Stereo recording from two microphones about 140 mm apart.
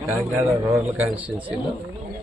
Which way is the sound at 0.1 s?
15° right (ahead or behind).